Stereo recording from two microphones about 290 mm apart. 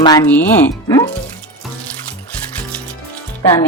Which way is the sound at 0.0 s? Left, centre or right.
Centre.